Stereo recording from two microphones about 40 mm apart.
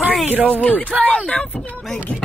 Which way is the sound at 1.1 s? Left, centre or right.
Left.